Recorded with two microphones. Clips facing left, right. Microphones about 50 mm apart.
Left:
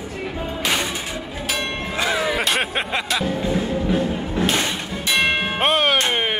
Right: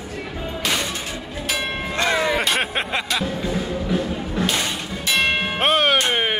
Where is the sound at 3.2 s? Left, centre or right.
Left.